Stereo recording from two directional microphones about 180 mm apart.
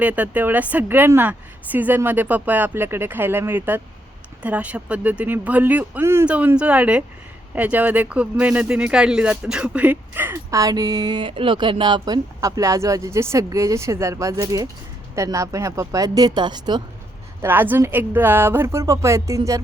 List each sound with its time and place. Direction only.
0.0 s speech: 10° right (ahead or behind); by 16.8 s 25° right (ahead or behind)
17.4 s speech: 10° right (ahead or behind)